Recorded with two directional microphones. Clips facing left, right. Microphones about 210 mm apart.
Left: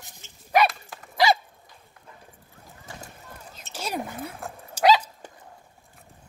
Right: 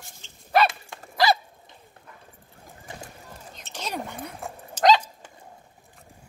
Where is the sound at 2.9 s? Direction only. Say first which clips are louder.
Right 2 dB; 20° right (ahead or behind).